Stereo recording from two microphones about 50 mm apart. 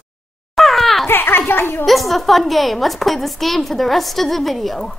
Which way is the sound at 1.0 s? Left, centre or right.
Left.